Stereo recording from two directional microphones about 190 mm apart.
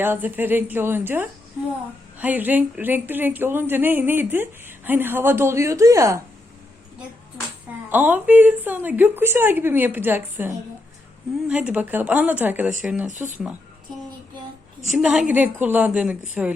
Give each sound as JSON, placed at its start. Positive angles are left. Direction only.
{"t": 0.0, "sound": "a woman's voice", "side_deg": -10}
{"t": 7.9, "sound": "a woman's voice", "side_deg": -10}
{"t": 13.1, "sound": "speech", "side_deg": -40}
{"t": 14.9, "sound": "a woman's voice", "side_deg": -5}